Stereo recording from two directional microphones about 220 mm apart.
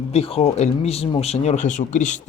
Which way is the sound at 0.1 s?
25° left (ahead or behind).